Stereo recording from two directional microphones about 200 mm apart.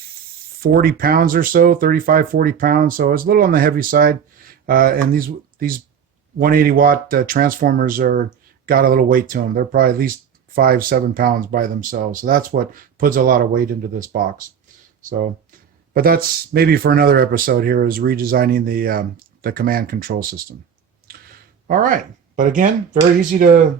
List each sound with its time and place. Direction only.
0.6 s speech: 45° right (ahead or behind)
16.0 s speech: 50° right (ahead or behind)
21.7 s speech: 40° right (ahead or behind)